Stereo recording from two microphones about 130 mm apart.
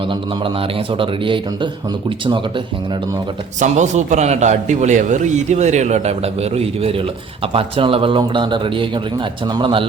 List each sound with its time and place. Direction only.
0.0 s speech: 40° right (ahead or behind)
3.6 s a man's voice: 65° right (ahead or behind); by 9.8 s 35° right (ahead or behind)